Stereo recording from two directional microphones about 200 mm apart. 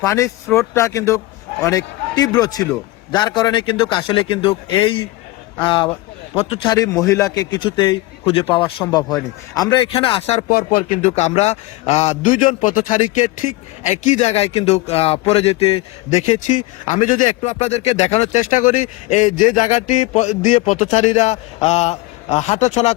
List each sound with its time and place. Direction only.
0.0 s speech: 15° left (ahead or behind)
0.4 s speech: centre (ahead or behind)
0.7 s a man's voice: 15° left (ahead or behind)
9.0 s speech: centre (ahead or behind)
9.6 s speech: 25° left (ahead or behind)
10.5 s speech: 45° left (ahead or behind)